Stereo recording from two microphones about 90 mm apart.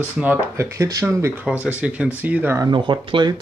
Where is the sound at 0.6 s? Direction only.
35° right (ahead or behind).